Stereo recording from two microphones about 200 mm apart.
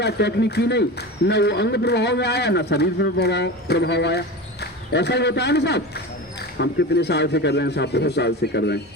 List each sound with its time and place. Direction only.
0.0 s a man's voice: 55° left (ahead or behind)